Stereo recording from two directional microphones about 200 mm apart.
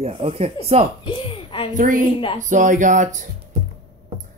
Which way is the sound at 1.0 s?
25° left (ahead or behind).